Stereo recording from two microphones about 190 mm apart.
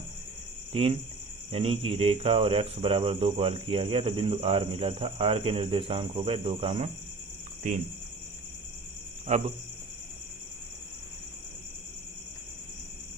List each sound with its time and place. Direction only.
0.7 s speech: 30° right (ahead or behind)
9.2 s speech: 35° right (ahead or behind)